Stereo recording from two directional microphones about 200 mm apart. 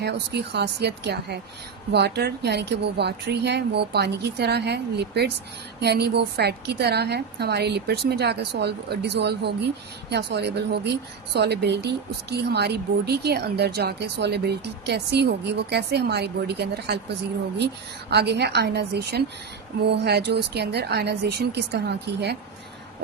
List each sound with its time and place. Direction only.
0.0 s a woman's voice: 55° right (ahead or behind)
18.1 s a woman's voice: 55° right (ahead or behind)